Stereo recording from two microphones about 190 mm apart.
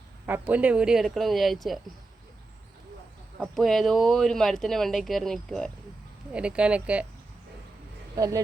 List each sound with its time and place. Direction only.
0.3 s speech: 10° right (ahead or behind)
3.4 s speech: centre (ahead or behind)
8.1 s speech: 20° right (ahead or behind)